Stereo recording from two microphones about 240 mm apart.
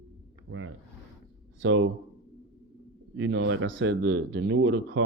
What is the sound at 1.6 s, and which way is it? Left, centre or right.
Speech, right.